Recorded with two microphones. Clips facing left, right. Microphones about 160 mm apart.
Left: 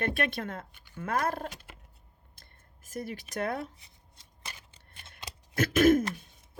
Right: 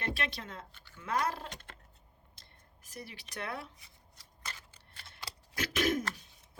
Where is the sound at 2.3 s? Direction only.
50° left (ahead or behind).